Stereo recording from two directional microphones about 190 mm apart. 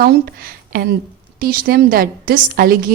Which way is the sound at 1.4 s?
50° right (ahead or behind).